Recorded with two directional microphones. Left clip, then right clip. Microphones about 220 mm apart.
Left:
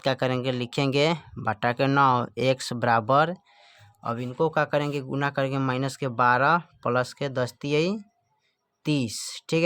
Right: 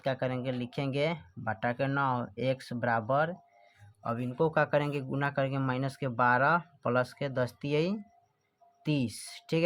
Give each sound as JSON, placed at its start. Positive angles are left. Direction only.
{"t": 0.0, "sound": "speech", "side_deg": 35}
{"t": 4.0, "sound": "speech", "side_deg": 25}